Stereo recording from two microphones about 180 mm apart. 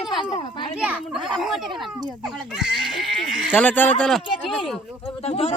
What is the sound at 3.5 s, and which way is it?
Speech, 10° left (ahead or behind).